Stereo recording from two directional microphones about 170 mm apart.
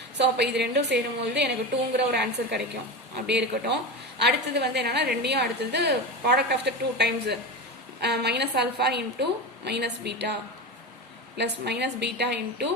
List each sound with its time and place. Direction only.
0.2 s a woman's voice: 80° right
11.3 s a woman's voice: 80° right